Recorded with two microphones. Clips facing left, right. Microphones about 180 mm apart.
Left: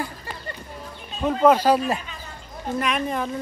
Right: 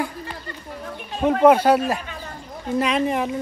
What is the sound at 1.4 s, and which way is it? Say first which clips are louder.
Speech: right 2 dB; 10° right (ahead or behind).